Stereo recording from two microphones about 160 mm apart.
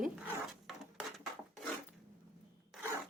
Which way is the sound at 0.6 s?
Centre (ahead or behind).